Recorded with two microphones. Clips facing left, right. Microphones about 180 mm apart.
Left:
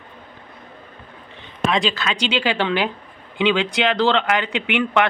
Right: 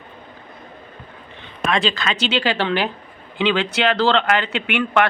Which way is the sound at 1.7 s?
10° left (ahead or behind).